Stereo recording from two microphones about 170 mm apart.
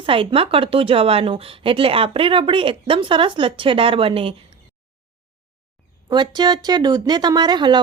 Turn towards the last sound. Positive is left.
turn(degrees=-25)  # may be behind; listen again after turning